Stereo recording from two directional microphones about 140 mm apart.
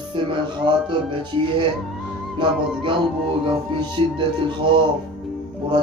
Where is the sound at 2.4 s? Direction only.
35° right (ahead or behind).